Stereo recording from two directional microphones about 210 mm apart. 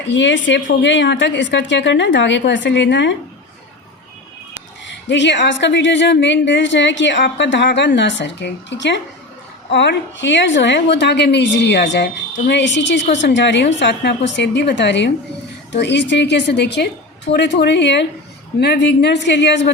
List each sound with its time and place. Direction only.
0.1 s a woman's voice: 60° left (ahead or behind)
4.9 s a woman's voice: 55° left (ahead or behind)